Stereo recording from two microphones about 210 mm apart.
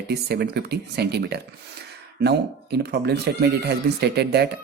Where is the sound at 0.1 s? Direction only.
50° right (ahead or behind).